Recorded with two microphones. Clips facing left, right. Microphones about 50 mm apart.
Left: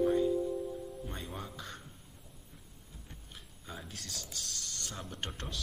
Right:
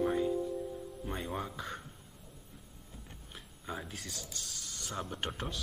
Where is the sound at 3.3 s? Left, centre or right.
Centre.